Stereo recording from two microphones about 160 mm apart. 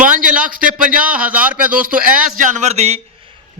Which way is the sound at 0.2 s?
60° right (ahead or behind).